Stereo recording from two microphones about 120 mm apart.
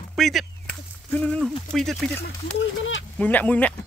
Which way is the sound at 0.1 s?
Centre (ahead or behind).